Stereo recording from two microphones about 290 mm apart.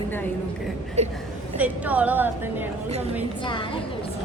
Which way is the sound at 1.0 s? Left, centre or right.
Right.